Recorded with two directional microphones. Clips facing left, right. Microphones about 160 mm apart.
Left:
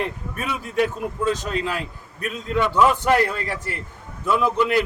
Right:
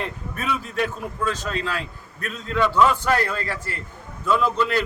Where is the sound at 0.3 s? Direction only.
10° left (ahead or behind).